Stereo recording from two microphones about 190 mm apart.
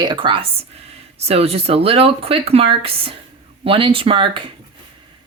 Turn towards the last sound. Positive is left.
turn(degrees=-25)  # may be behind; listen again after turning